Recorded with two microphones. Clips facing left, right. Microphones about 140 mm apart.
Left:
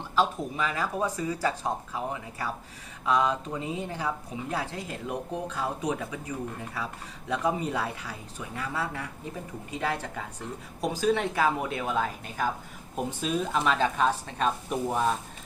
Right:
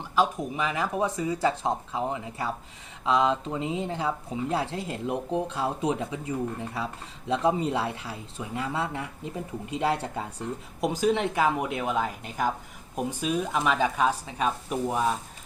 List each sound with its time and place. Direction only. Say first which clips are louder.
0.2 s speech: right 1 dB; 15° right (ahead or behind)